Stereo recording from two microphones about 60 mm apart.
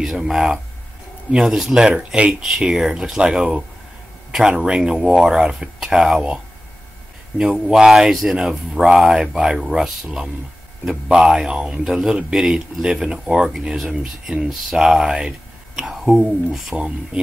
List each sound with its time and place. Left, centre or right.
0.2 s a man's voice: centre
7.3 s a man's voice: centre
10.9 s a man's voice: centre
16.7 s a man's voice: centre